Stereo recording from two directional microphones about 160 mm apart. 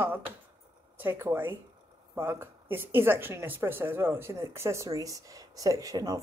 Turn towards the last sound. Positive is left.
turn(degrees=-20)  # may be behind; listen again after turning